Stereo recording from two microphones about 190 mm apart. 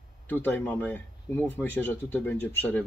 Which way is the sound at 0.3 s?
10° left (ahead or behind).